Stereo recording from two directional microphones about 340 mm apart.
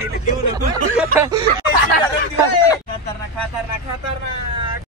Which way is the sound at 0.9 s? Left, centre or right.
Centre.